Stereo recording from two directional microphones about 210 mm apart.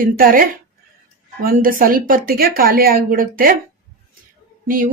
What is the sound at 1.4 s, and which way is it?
Speech, 40° right (ahead or behind).